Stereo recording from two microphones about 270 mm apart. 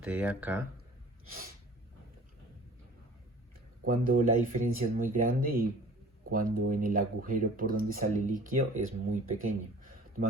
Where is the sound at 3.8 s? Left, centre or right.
Right.